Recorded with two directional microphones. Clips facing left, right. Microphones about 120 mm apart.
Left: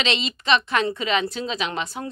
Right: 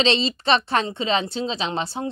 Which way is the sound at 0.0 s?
30° right (ahead or behind).